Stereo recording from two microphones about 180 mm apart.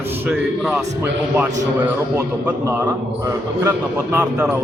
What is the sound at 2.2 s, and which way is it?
A man's voice, 10° right (ahead or behind).